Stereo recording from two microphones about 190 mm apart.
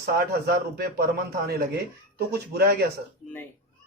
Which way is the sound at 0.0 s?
55° right (ahead or behind).